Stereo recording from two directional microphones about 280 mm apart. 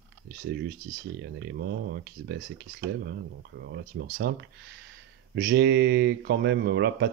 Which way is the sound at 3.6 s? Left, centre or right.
Right.